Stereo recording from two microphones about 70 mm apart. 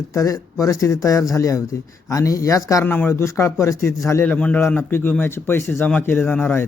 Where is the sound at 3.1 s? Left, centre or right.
Left.